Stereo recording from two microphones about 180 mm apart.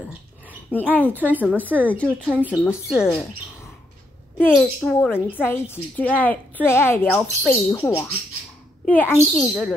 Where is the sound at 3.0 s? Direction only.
5° left (ahead or behind).